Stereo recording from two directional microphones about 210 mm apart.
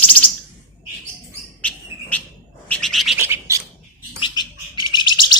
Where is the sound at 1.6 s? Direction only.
5° left (ahead or behind).